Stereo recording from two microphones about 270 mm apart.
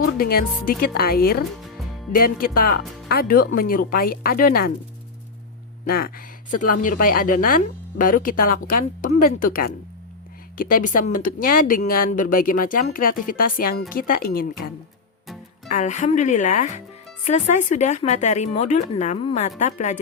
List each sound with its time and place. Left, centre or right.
0.2 s speech: left
5.8 s speech: left
15.7 s speech: left